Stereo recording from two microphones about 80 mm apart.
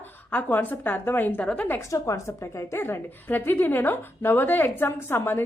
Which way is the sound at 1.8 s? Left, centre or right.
Left.